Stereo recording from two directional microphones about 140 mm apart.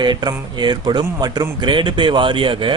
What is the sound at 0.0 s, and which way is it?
Speech, 30° right (ahead or behind).